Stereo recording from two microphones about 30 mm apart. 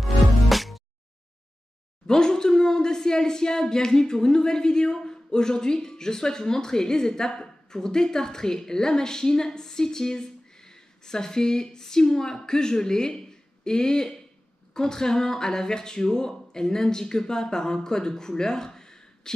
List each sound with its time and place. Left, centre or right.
0.0 s music: centre
2.0 s speech: left